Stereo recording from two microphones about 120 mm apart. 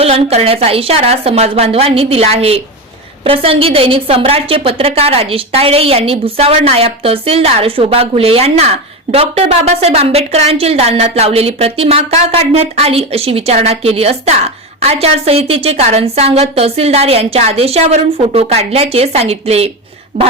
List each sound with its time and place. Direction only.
0.0 s a woman's voice: 60° right (ahead or behind)